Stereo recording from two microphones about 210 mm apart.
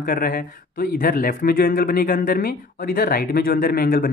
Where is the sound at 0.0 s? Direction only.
40° left (ahead or behind).